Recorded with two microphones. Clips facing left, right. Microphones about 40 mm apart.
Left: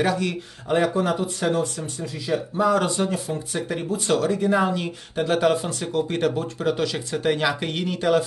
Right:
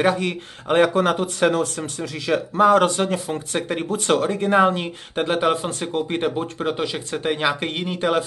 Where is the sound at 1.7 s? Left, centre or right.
Right.